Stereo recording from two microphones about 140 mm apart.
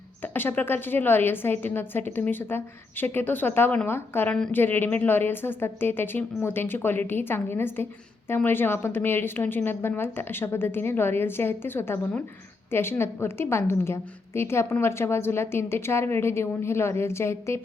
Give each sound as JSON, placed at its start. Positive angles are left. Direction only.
{"t": 0.2, "sound": "a woman's voice", "side_deg": 15}